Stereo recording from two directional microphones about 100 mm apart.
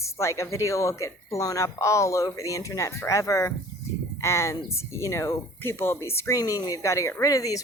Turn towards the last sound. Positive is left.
turn(degrees=35)  # may be behind; listen again after turning